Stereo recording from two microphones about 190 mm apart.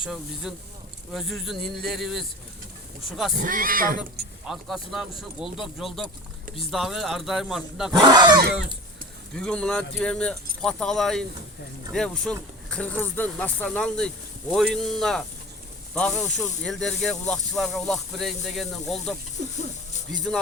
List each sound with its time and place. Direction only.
0.0 s speech: centre (ahead or behind)
3.3 s speech: 45° right (ahead or behind)
4.4 s speech: centre (ahead or behind)
8.0 s speech: 20° right (ahead or behind)
9.3 s speech: 5° left (ahead or behind)
20.3 s speech: 5° left (ahead or behind)